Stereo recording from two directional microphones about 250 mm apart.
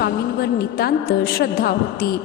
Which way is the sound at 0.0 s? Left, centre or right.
Left.